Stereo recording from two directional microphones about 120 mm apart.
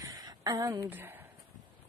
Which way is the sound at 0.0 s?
35° right (ahead or behind).